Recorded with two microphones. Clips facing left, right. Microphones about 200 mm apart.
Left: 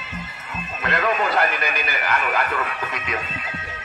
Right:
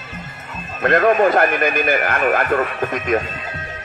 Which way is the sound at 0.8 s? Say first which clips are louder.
Right 9 dB; 50° right (ahead or behind).